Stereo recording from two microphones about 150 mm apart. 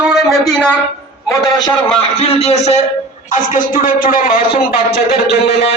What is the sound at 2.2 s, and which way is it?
Speech, 45° left (ahead or behind).